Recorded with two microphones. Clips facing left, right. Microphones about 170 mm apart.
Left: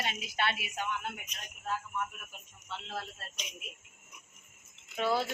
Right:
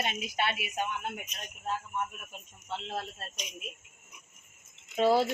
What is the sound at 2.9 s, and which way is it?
Speech, 25° right (ahead or behind).